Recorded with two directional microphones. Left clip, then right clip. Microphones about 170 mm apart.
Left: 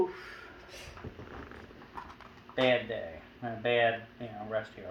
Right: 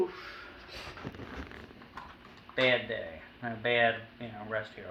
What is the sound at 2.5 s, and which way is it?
Speech, 35° left (ahead or behind).